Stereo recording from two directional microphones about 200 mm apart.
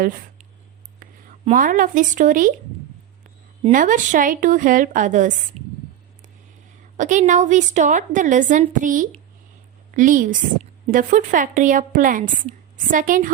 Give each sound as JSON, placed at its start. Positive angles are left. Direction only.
{"t": 1.5, "sound": "a woman's voice", "side_deg": -40}
{"t": 3.7, "sound": "a woman's voice", "side_deg": -40}
{"t": 6.9, "sound": "a woman's voice", "side_deg": -40}